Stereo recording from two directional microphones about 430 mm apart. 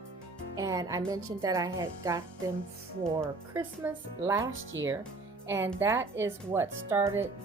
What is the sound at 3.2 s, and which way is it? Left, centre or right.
Speech, centre.